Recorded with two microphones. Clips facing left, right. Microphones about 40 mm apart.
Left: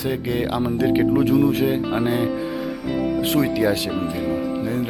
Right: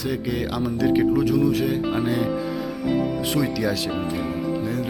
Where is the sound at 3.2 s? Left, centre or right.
Left.